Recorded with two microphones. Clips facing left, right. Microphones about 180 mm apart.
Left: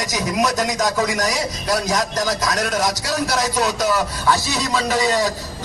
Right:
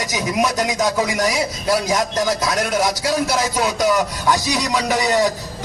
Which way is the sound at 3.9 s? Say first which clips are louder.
Right 1 dB; 15° right (ahead or behind).